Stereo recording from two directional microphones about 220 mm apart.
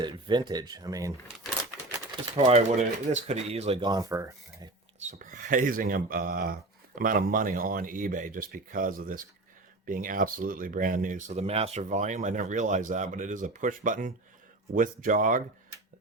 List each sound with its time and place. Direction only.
0.0 s speech: 20° right (ahead or behind)
2.3 s speech: 30° right (ahead or behind)
4.9 s speech: 35° right (ahead or behind)